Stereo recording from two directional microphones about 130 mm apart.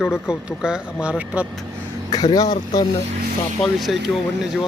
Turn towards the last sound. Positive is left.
turn(degrees=0)  # may be behind; listen again after turning